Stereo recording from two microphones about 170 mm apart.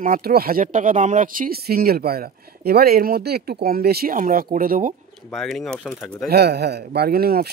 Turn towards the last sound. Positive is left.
turn(degrees=-65)  # may be behind; listen again after turning